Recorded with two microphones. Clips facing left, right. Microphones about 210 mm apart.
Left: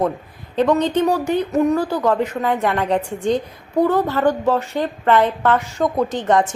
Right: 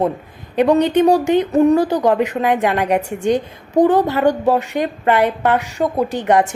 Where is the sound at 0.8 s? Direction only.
15° right (ahead or behind).